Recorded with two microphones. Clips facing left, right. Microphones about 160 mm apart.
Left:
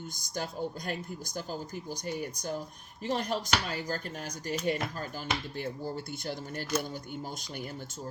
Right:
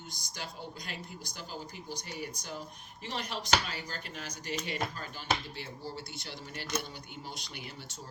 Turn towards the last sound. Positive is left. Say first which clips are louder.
# left 5 dB
turn(degrees=45)  # may be behind; listen again after turning